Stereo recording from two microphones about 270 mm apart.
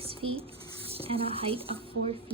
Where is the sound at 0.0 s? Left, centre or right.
Centre.